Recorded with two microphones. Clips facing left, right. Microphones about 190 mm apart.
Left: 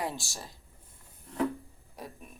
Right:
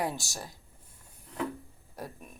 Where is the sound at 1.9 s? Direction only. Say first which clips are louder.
Right 2 dB; centre (ahead or behind).